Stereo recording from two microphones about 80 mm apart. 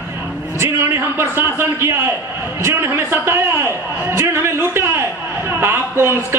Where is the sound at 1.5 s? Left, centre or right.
Right.